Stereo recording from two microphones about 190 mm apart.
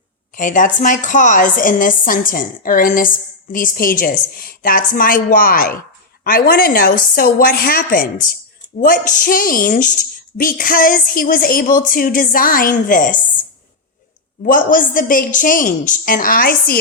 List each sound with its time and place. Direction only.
0.3 s speech: 45° left (ahead or behind)
14.4 s speech: 45° left (ahead or behind)